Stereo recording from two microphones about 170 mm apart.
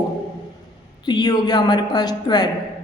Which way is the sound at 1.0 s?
25° left (ahead or behind).